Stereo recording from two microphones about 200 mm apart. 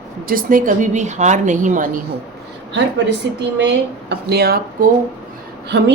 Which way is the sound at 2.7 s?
60° right (ahead or behind).